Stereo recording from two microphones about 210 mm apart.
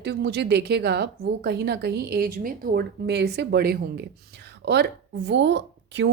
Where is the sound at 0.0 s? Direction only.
50° right (ahead or behind).